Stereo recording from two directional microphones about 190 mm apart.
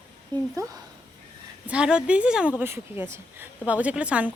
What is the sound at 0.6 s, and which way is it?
Speech, 15° right (ahead or behind).